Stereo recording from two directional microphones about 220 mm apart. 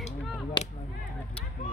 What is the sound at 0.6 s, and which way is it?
Whip, 20° left (ahead or behind).